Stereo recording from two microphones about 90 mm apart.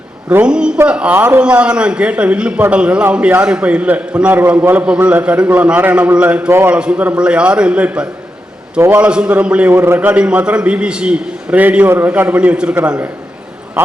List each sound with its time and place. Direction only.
0.4 s a man's voice: 10° right (ahead or behind)
6.5 s a man's voice: 25° right (ahead or behind)
6.7 s a man's voice: 10° right (ahead or behind)